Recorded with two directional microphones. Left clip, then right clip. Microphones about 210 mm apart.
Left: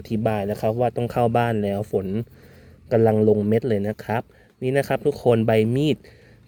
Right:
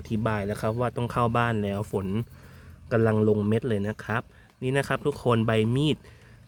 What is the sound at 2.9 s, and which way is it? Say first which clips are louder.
A man's voice: left 6 dB; 15° left (ahead or behind).